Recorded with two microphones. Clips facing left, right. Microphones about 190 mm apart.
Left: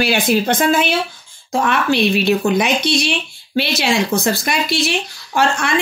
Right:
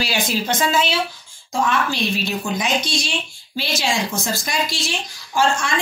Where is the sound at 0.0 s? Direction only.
60° left (ahead or behind).